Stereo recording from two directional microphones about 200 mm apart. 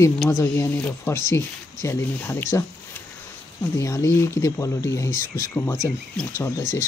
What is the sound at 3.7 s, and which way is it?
Speech, 15° left (ahead or behind).